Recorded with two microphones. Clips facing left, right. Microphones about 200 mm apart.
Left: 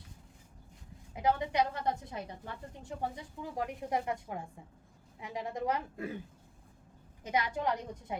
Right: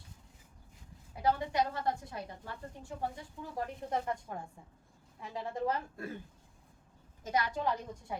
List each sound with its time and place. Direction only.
1.1 s a woman's voice: 20° left (ahead or behind)
7.3 s a woman's voice: 20° left (ahead or behind)